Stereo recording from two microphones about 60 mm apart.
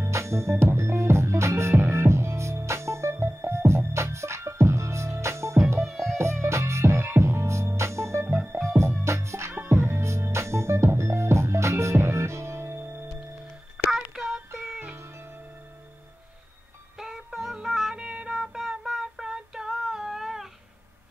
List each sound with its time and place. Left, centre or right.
0.0 s music: right
5.8 s music: centre
6.4 s music: right
9.5 s music: right
13.8 s a sound: centre
14.1 s child singing: centre
16.9 s music: centre
17.9 s child singing: centre